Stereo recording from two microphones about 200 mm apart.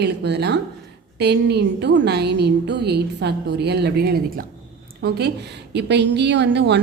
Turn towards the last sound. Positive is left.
turn(degrees=-60)  # may be behind; listen again after turning